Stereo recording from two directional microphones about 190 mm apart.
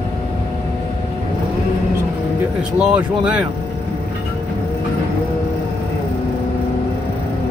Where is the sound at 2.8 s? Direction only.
5° right (ahead or behind).